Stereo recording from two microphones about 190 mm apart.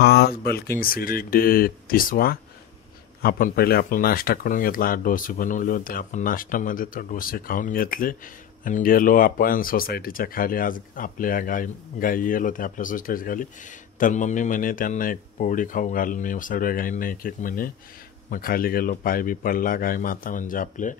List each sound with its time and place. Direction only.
0.0 s speech: 55° left (ahead or behind)